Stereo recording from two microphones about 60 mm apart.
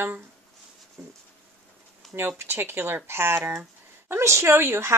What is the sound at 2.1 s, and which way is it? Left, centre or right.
A woman's voice, right.